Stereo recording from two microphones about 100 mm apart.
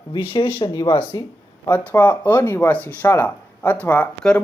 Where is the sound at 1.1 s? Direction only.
35° left (ahead or behind).